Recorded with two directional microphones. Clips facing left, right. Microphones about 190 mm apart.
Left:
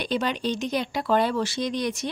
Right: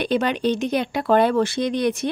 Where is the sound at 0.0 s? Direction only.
60° right (ahead or behind).